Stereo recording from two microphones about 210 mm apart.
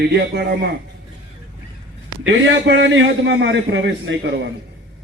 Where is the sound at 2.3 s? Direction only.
60° right (ahead or behind).